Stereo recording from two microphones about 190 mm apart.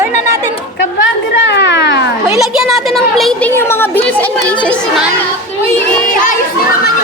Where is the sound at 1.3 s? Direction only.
65° left (ahead or behind).